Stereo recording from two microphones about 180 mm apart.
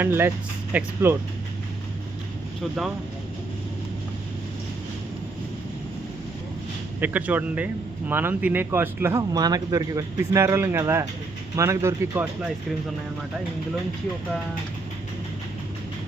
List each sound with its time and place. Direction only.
0.0 s speech: 10° right (ahead or behind)
7.0 s speech: 10° right (ahead or behind)